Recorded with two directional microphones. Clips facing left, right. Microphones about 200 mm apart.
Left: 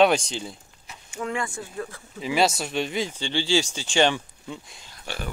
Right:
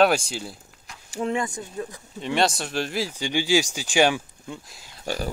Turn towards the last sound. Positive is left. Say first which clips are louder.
# right 6 dB
turn(degrees=-40)  # may be behind; listen again after turning